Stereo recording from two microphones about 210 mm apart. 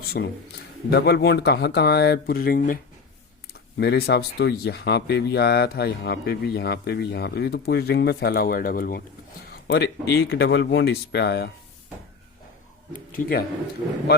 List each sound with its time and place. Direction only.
0.1 s speech: 50° left (ahead or behind)
3.8 s speech: 50° left (ahead or behind)
13.1 s speech: 45° left (ahead or behind)